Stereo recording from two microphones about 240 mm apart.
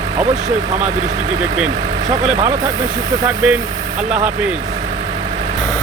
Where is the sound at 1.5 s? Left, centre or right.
Centre.